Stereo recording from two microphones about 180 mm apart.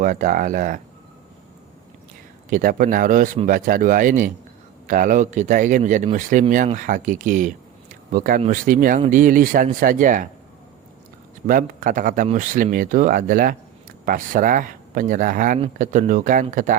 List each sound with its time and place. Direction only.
0.0 s a man's voice: 45° right (ahead or behind)
2.5 s a man's voice: 50° right (ahead or behind)
11.4 s a man's voice: 50° right (ahead or behind)